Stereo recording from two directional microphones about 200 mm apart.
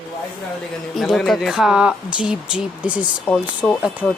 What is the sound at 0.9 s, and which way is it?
Speech, centre (ahead or behind).